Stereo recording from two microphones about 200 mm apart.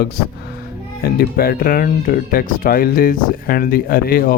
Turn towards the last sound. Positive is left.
turn(degrees=50)  # may be behind; listen again after turning